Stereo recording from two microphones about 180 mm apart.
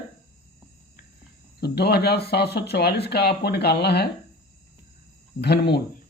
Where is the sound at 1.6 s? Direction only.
65° left (ahead or behind).